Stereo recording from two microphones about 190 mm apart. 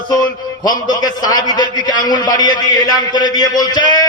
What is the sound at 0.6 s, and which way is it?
A man's voice, 20° left (ahead or behind).